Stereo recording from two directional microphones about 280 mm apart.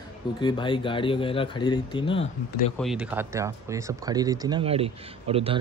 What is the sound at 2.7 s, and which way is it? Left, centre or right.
A man's voice, centre.